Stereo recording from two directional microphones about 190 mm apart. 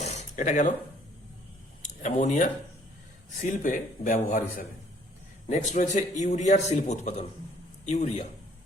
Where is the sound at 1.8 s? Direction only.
40° left (ahead or behind).